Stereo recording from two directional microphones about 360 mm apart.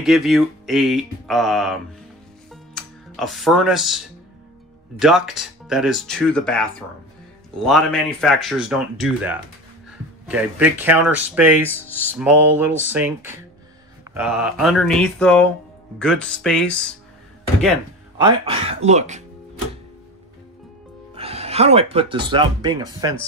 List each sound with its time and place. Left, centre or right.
0.0 s speech: centre
2.5 s music: centre
4.9 s speech: centre
18.1 s speech: centre
21.1 s speech: centre